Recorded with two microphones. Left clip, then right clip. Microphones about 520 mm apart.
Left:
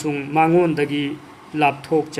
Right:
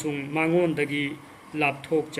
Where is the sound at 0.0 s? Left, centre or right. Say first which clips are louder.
Left 8 dB; right.